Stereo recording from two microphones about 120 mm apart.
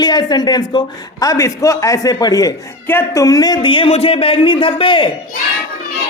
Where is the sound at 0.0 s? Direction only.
35° left (ahead or behind).